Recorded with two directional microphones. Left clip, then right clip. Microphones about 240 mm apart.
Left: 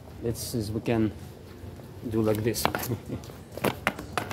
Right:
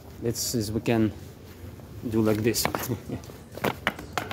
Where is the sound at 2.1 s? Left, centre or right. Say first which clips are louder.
Right 2 dB; right.